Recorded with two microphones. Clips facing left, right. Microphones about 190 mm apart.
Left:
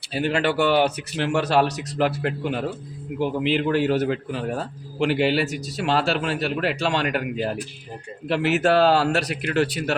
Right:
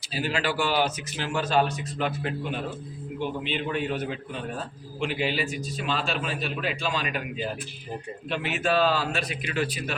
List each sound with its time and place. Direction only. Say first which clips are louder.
0.1 s a man's voice: left 6 dB; 60° left (ahead or behind); by 2.6 s 75° left (ahead or behind)
3.2 s a man's voice: left 8 dB; 85° left